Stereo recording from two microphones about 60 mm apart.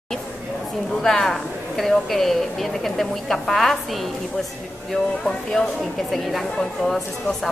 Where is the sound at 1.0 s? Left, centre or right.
Centre.